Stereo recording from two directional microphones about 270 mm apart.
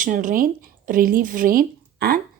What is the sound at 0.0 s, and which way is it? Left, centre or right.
A woman's voice, right.